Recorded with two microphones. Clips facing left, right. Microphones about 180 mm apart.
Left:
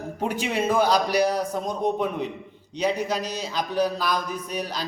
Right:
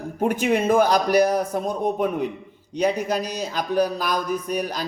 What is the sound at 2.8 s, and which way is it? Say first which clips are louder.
Speech: right 3 dB; 10° right (ahead or behind).